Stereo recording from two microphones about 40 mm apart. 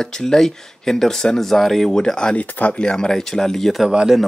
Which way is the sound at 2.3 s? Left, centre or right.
Left.